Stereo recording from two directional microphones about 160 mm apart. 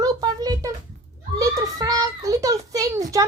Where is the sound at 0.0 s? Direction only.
25° right (ahead or behind).